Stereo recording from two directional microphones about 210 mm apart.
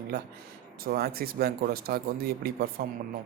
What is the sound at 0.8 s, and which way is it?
Speech, 45° right (ahead or behind).